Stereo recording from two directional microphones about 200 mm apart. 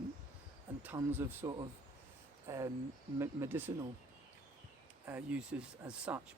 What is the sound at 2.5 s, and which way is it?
Speech, 15° right (ahead or behind).